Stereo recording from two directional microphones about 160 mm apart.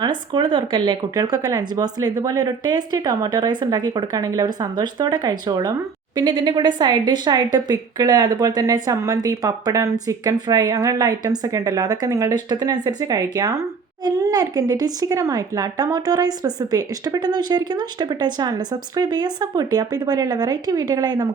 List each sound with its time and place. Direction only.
0.0 s speech: 30° right (ahead or behind)